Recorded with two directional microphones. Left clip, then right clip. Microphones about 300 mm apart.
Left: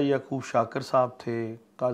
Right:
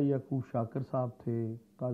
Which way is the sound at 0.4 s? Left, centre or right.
Centre.